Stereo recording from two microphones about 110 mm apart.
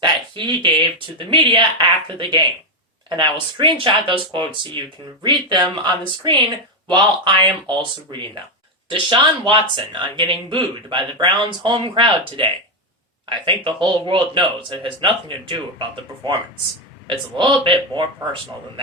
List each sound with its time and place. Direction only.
0.0 s speech: 45° right (ahead or behind)